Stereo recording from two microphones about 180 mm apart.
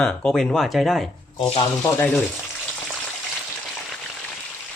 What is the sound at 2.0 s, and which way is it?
Speech, 10° left (ahead or behind).